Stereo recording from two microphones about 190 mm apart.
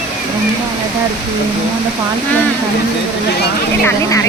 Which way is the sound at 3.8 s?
15° left (ahead or behind).